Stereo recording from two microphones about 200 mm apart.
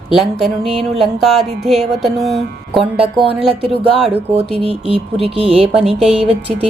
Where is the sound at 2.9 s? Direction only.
30° right (ahead or behind).